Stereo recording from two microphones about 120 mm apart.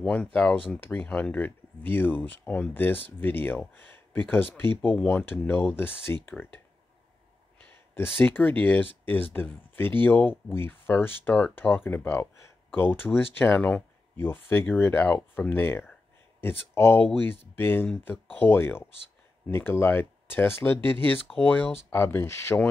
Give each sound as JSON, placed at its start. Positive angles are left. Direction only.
{"t": 0.0, "sound": "speech", "side_deg": 10}
{"t": 7.6, "sound": "speech", "side_deg": 15}